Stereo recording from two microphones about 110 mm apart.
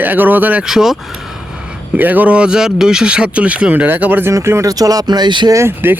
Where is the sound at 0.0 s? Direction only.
15° right (ahead or behind).